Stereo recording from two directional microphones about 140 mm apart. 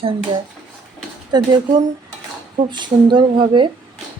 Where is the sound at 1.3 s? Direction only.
30° right (ahead or behind).